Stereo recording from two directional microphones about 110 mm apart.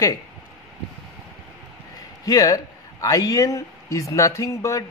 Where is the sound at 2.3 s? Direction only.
35° left (ahead or behind).